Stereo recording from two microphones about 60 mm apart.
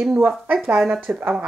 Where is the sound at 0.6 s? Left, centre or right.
Centre.